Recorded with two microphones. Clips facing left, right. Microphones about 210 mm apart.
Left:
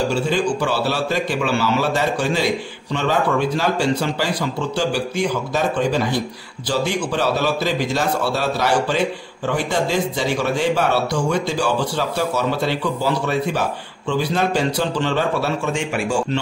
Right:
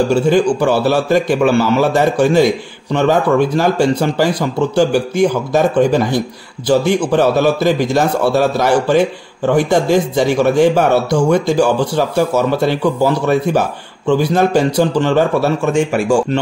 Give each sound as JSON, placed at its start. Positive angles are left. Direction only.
{"t": 0.1, "sound": "speech", "side_deg": -50}